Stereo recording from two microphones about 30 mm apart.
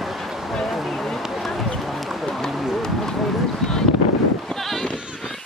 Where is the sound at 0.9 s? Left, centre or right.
Centre.